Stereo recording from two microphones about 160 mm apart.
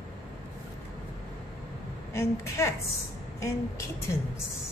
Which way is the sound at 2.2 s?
20° left (ahead or behind).